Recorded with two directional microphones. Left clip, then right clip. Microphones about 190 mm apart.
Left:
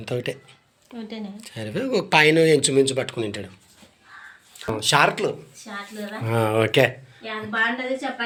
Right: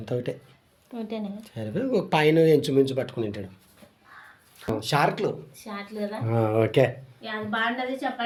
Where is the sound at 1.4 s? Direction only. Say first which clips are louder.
Left 5 dB; 10° right (ahead or behind).